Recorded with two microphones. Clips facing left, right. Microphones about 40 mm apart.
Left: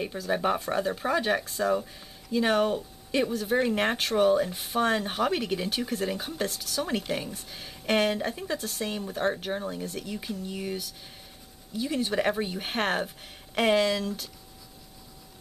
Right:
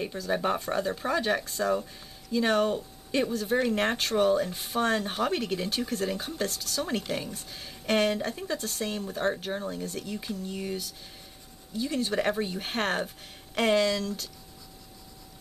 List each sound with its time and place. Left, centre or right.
0.0 s speech: centre